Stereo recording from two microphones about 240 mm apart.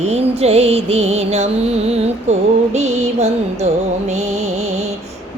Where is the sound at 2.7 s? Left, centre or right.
Right.